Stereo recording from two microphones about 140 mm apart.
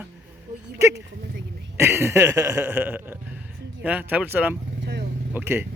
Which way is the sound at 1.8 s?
15° right (ahead or behind).